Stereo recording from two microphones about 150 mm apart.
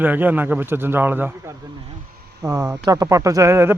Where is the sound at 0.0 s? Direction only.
10° right (ahead or behind).